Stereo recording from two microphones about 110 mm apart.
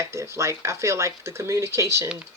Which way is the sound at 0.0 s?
25° right (ahead or behind).